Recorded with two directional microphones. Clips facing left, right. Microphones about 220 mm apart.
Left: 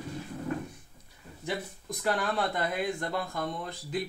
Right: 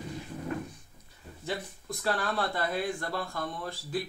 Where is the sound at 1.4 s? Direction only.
15° left (ahead or behind).